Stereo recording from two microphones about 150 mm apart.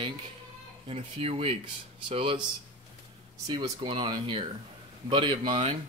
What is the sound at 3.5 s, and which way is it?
Speech, 30° right (ahead or behind).